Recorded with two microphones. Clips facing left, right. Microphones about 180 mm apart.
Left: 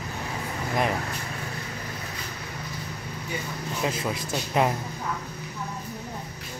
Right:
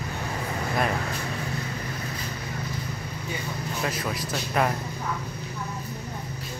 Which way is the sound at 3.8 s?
25° left (ahead or behind).